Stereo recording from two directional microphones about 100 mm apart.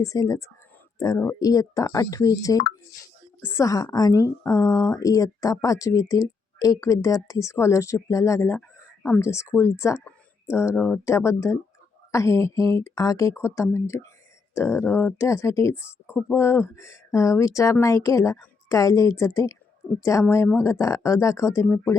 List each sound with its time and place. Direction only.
0.0 s a woman's voice: 35° left (ahead or behind)
3.4 s speech: 25° left (ahead or behind)
3.9 s a woman's voice: 35° left (ahead or behind)